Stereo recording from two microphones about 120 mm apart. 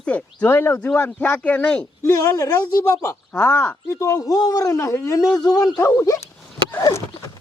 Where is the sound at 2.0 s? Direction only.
25° left (ahead or behind).